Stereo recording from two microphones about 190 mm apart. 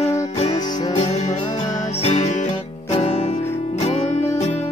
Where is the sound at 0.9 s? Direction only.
35° left (ahead or behind).